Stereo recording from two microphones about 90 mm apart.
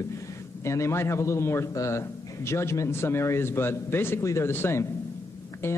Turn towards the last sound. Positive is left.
turn(degrees=25)  # may be behind; listen again after turning